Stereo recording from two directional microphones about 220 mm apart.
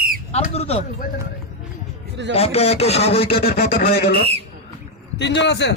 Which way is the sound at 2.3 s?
25° left (ahead or behind).